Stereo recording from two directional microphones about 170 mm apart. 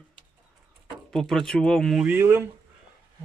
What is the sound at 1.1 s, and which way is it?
Speech, 5° left (ahead or behind).